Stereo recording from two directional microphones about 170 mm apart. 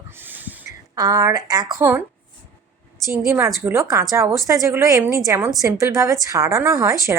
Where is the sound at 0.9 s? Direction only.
20° right (ahead or behind).